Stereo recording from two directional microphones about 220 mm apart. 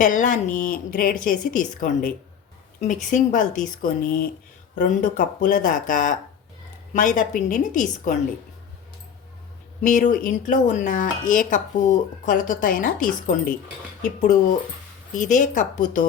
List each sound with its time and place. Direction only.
0.0 s speech: 35° left (ahead or behind)
9.8 s speech: 35° left (ahead or behind)